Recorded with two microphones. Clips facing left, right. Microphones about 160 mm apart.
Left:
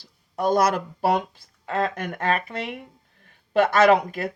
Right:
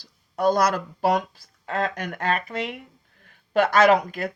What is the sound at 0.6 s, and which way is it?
Speech, 25° left (ahead or behind).